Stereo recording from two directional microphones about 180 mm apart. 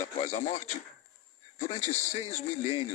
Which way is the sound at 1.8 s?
40° left (ahead or behind).